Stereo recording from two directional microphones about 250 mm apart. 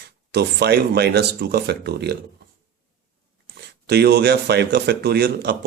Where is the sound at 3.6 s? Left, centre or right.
Right.